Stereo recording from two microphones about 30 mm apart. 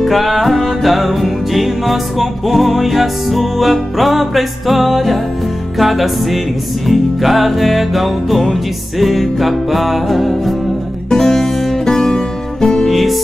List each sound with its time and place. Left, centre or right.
0.0 s music: centre
11.1 s music: centre
11.9 s music: centre
12.9 s music: centre